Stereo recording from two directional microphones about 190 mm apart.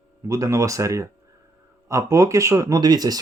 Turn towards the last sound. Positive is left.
turn(degrees=-20)  # may be behind; listen again after turning